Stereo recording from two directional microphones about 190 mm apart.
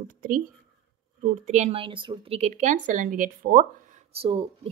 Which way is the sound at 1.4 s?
35° right (ahead or behind).